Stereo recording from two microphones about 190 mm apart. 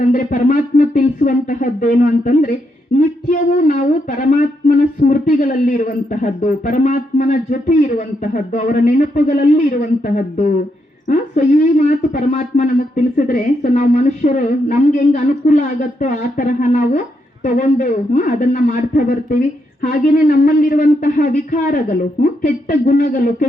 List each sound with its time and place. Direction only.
0.0 s a man's voice: 45° left (ahead or behind)